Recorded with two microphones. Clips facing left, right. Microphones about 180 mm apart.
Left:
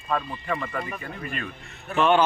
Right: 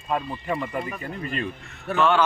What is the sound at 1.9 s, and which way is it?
Speech, 20° left (ahead or behind).